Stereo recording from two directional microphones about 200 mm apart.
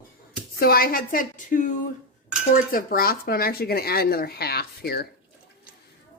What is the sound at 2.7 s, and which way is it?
Speech, 45° left (ahead or behind).